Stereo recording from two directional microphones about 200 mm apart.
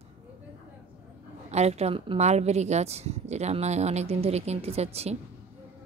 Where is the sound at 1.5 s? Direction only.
35° right (ahead or behind).